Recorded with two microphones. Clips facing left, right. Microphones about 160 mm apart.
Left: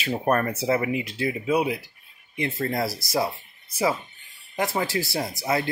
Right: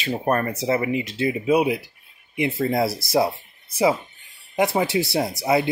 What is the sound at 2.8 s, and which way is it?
Speech, 25° right (ahead or behind).